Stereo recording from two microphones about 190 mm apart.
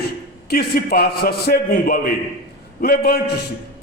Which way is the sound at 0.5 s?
55° left (ahead or behind).